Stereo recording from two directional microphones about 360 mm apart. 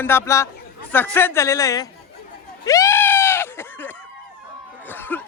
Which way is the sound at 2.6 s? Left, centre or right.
Centre.